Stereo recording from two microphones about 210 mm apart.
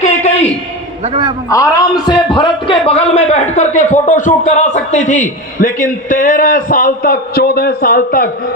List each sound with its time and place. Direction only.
0.0 s a sound: 30° left (ahead or behind)
1.0 s a man's voice: 30° right (ahead or behind)
1.5 s a man's voice: 15° left (ahead or behind); by 8.3 s 45° left (ahead or behind)